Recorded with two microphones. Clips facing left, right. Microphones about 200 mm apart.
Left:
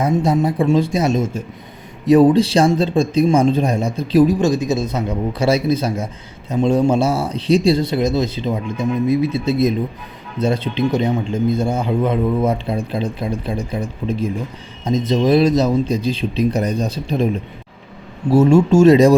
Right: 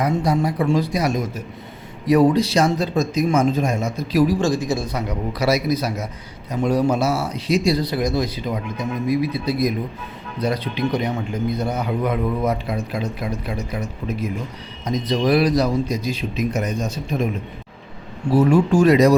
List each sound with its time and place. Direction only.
0.0 s a man's voice: 25° left (ahead or behind)
18.3 s a man's voice: 25° left (ahead or behind)